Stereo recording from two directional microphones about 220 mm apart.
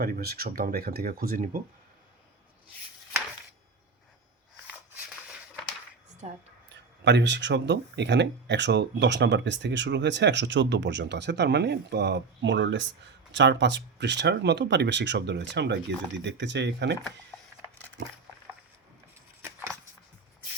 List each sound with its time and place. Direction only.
0.0 s speech: 45° right (ahead or behind)
7.0 s speech: 55° right (ahead or behind)
19.4 s a sound: 15° right (ahead or behind)